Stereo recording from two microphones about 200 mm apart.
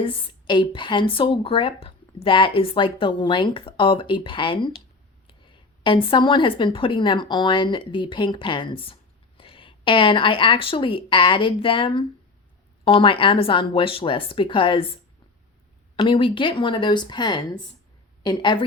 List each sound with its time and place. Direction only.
0.0 s speech: 25° left (ahead or behind)
16.0 s a woman's voice: 25° left (ahead or behind)